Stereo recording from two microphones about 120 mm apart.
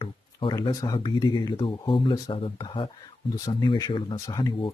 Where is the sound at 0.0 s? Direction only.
40° left (ahead or behind).